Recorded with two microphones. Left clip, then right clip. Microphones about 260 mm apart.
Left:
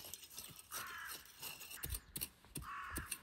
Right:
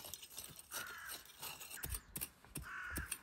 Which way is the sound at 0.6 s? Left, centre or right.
Right.